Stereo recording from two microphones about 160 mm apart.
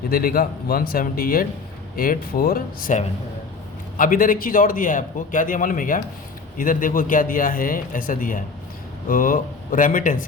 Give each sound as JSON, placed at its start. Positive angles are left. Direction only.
{"t": 0.1, "sound": "a man's voice", "side_deg": 65}